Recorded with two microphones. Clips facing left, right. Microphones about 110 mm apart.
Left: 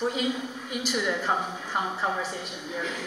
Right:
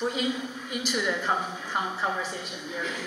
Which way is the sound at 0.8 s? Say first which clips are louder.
Left 1 dB; 10° left (ahead or behind).